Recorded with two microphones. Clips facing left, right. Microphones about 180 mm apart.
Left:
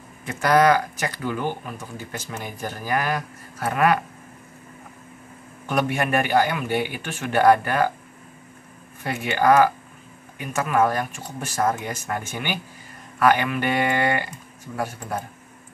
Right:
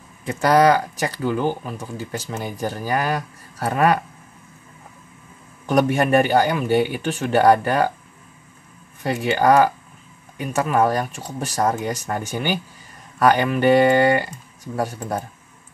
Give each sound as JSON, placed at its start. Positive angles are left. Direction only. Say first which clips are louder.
{"t": 0.3, "sound": "speech", "louder": "right 2 dB", "side_deg": -30}
{"t": 5.7, "sound": "speech", "louder": "right 6 dB", "side_deg": -40}
{"t": 9.0, "sound": "speech", "louder": "right 3 dB", "side_deg": -35}